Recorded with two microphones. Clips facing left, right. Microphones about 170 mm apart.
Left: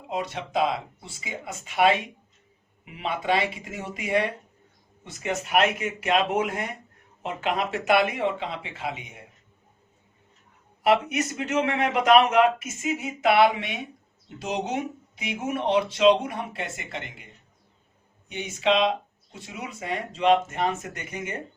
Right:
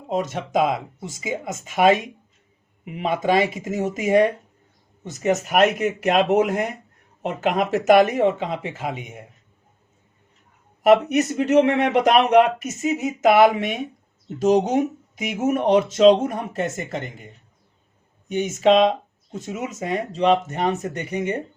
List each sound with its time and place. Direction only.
0.1 s speech: 45° right (ahead or behind)
10.8 s speech: 40° right (ahead or behind)
18.3 s speech: 45° right (ahead or behind)